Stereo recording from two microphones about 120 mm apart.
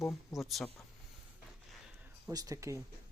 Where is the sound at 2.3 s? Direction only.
30° right (ahead or behind).